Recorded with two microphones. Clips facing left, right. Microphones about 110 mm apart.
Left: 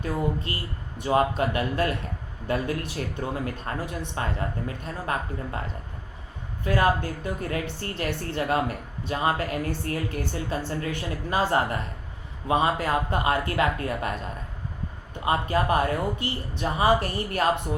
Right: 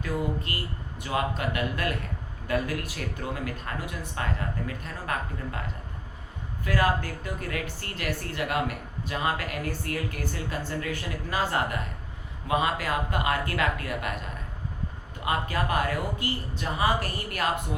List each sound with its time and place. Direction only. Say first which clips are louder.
0.0 s speech: left 2 dB; 25° left (ahead or behind)
6.7 s speech: left 3 dB; 25° left (ahead or behind)
15.2 s speech: left 4 dB; 25° left (ahead or behind)